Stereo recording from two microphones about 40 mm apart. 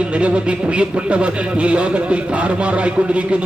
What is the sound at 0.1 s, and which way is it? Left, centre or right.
A man's voice, right.